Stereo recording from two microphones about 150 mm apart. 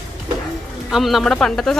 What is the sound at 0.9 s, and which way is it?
Speech, centre (ahead or behind).